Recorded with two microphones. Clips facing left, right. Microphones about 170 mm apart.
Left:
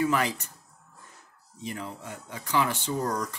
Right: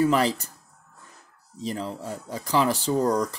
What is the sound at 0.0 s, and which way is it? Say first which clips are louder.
Speech: right 5 dB; 35° right (ahead or behind).